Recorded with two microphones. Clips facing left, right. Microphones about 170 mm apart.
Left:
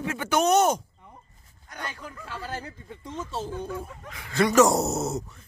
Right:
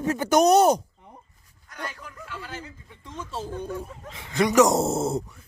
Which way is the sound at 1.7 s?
30° left (ahead or behind).